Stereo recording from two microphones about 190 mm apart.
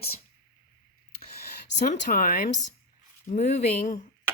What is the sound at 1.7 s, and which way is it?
Speech, 40° left (ahead or behind).